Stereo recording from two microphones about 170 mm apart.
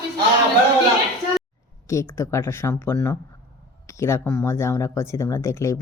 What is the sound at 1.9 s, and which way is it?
Speech, 15° left (ahead or behind).